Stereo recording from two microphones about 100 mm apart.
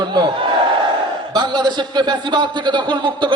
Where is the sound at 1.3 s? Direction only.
45° right (ahead or behind).